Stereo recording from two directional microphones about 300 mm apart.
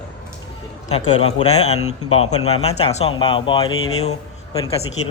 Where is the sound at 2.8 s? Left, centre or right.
Centre.